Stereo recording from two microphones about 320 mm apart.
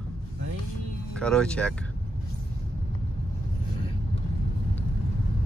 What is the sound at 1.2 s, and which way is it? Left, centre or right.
Speech, centre.